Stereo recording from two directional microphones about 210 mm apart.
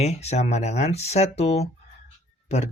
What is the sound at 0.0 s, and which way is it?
Speech, 30° left (ahead or behind).